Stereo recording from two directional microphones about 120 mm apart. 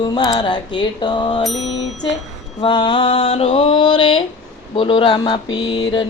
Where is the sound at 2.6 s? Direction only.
45° left (ahead or behind).